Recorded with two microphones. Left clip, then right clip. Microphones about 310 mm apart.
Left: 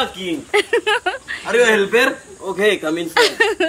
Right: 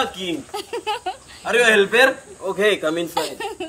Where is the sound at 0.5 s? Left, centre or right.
Centre.